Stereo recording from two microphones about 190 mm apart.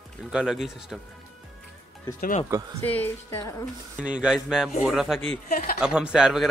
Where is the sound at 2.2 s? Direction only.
45° left (ahead or behind).